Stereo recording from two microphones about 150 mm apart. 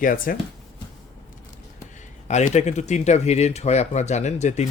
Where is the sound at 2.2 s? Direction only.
50° left (ahead or behind).